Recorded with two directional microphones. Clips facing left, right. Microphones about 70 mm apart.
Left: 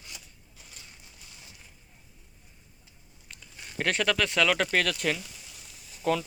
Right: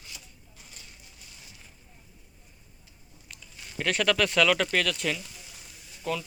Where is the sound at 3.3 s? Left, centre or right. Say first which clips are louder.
Left 1 dB; left.